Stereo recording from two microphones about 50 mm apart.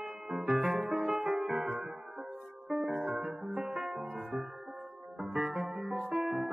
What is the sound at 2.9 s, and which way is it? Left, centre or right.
Music, right.